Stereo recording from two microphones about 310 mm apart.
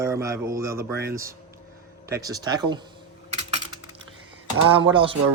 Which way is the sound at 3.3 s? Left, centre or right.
Right.